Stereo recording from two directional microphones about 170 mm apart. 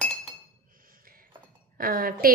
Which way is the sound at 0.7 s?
55° right (ahead or behind).